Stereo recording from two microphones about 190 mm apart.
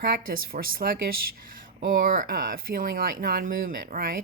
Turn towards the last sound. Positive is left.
turn(degrees=-50)  # may be behind; listen again after turning